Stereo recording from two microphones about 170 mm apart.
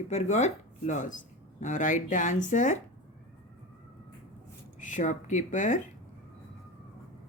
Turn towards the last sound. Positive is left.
turn(degrees=45)  # may be behind; listen again after turning